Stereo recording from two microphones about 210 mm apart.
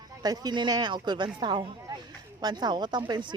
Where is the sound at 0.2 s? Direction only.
20° right (ahead or behind).